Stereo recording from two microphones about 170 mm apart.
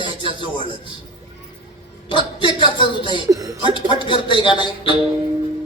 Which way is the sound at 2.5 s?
30° left (ahead or behind).